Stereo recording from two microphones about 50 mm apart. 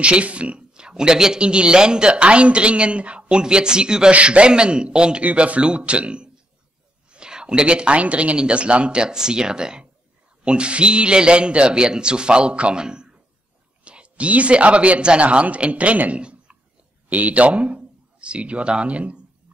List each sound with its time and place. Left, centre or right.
0.0 s speech: right